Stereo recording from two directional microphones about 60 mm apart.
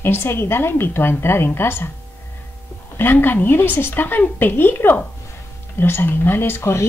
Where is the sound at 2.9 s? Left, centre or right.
Left.